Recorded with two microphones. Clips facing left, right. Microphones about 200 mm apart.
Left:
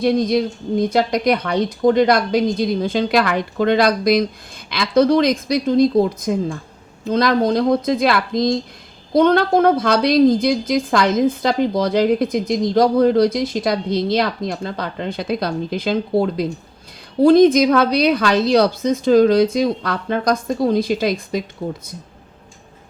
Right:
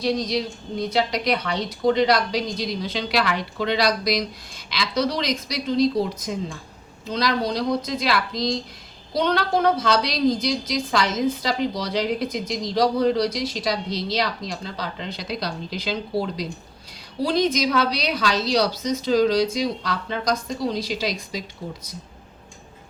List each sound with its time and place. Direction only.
0.0 s a woman's voice: 55° left (ahead or behind)